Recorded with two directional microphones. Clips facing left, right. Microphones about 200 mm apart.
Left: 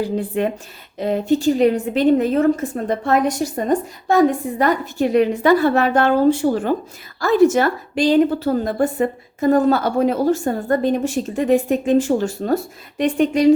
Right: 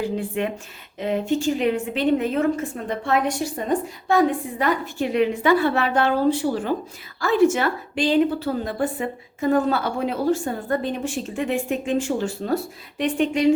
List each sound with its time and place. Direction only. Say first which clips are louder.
0.0 s a woman's voice: left 4 dB; 40° left (ahead or behind)